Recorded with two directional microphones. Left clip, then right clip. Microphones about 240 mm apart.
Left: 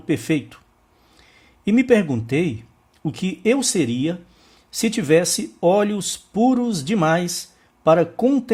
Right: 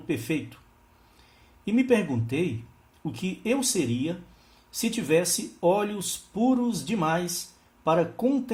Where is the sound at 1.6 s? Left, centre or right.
Left.